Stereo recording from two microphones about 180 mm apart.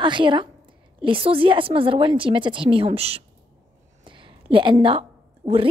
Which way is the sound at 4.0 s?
25° right (ahead or behind).